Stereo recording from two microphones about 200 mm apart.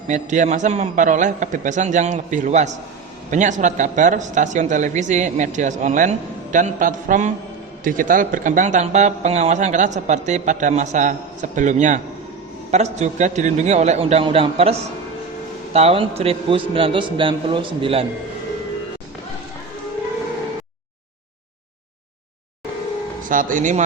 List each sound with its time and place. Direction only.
0.1 s a man's voice: 35° right (ahead or behind)
23.3 s a man's voice: 40° right (ahead or behind)